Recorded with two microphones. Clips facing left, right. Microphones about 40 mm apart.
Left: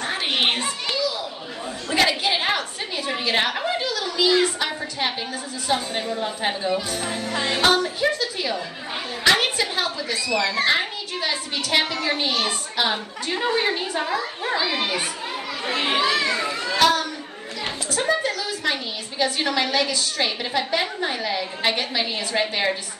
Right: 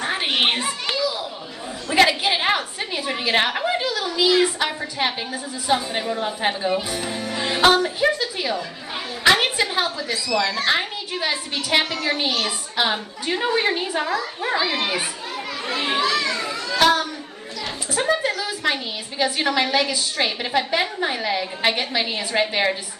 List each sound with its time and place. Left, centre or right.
0.0 s a sound: centre
4.4 s a woman's voice: centre
7.1 s music: centre
7.4 s a woman's voice: centre
15.6 s children playing: left
16.7 s a child's voice: centre